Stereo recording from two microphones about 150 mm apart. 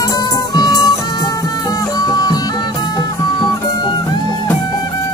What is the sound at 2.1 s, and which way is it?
Music, 25° left (ahead or behind).